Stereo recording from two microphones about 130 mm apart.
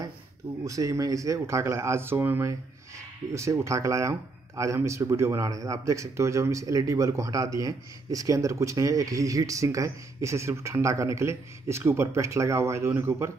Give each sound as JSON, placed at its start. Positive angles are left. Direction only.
{"t": 0.7, "sound": "speech", "side_deg": -25}